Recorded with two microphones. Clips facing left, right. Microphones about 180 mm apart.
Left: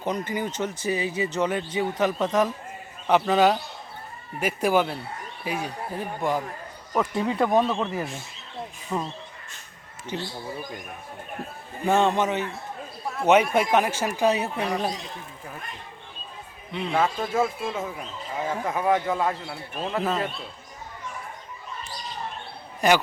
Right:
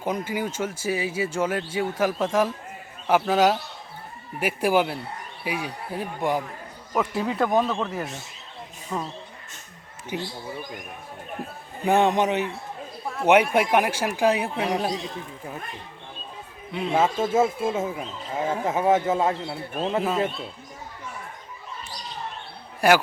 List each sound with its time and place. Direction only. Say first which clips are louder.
0.0 s speech: right 1 dB; 10° right (ahead or behind); by 9.1 s 10° left (ahead or behind)
10.1 s speech: right 1 dB; 10° right (ahead or behind)
11.4 s speech: even; 15° right (ahead or behind)
16.7 s speech: right 2 dB; 10° right (ahead or behind)
17.0 s speech: right 3 dB; 25° right (ahead or behind)
20.0 s speech: right 1 dB; 5° right (ahead or behind)
22.8 s speech: right 2 dB; 10° right (ahead or behind)